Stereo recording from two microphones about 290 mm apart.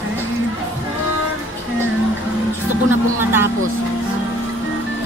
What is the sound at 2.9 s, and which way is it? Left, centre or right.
Speech, centre.